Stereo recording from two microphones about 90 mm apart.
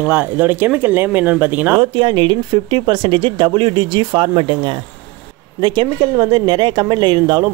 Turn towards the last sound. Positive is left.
turn(degrees=-55)  # may be behind; listen again after turning